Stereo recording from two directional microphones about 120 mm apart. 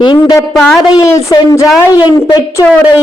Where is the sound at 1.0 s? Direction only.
30° left (ahead or behind).